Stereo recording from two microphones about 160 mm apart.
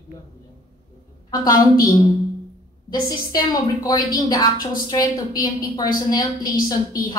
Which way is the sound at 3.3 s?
25° left (ahead or behind).